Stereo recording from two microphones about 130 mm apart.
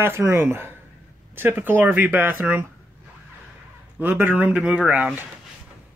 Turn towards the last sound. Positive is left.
turn(degrees=-10)  # may be behind; listen again after turning